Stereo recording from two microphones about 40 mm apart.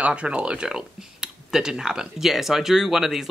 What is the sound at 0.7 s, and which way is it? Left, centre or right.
Speech, centre.